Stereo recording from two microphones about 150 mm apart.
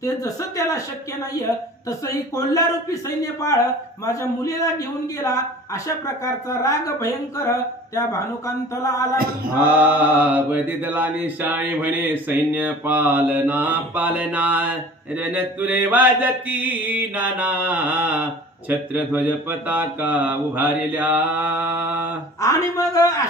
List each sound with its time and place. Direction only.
0.0 s a man's voice: 25° left (ahead or behind)
1.9 s a man's voice: 20° left (ahead or behind)
9.6 s mantra: 10° right (ahead or behind)
22.4 s a man's voice: 20° left (ahead or behind)